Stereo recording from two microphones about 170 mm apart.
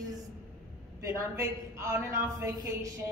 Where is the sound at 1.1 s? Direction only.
15° right (ahead or behind).